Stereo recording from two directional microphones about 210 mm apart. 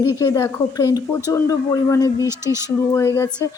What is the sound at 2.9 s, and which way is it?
Speech, 15° left (ahead or behind).